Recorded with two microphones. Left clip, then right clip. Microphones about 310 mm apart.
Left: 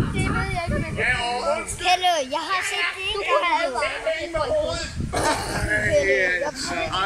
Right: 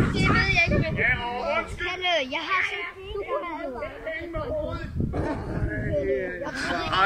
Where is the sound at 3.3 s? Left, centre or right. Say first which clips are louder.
Left 11 dB; left.